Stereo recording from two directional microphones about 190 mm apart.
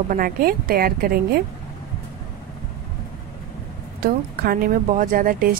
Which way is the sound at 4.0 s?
45° right (ahead or behind).